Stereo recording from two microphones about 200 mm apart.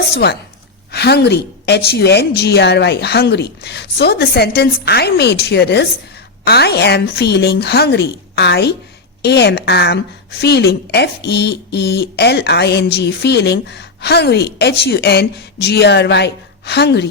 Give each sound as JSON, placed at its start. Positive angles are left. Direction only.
{"t": 0.0, "sound": "speech", "side_deg": 55}